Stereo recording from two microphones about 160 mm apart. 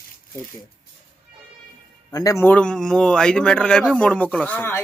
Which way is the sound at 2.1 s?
20° left (ahead or behind).